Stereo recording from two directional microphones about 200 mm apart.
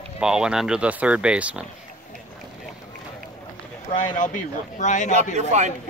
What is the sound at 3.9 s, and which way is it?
Speech, 40° left (ahead or behind).